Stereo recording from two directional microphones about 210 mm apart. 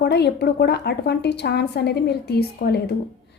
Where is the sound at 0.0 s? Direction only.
55° left (ahead or behind).